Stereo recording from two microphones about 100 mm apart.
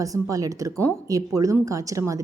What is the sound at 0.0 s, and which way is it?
A woman's voice, 35° right (ahead or behind).